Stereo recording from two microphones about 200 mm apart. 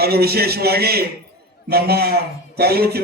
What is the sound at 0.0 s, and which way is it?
A man's voice, 50° right (ahead or behind).